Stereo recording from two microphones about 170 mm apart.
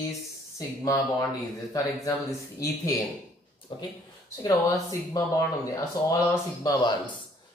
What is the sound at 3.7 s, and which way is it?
Speech, 25° left (ahead or behind).